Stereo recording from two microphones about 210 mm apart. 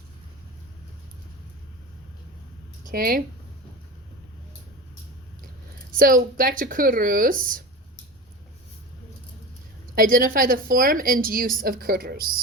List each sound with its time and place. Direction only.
2.9 s a woman's voice: 45° right (ahead or behind)
5.9 s speech: 40° right (ahead or behind)
9.9 s a woman's voice: 40° right (ahead or behind)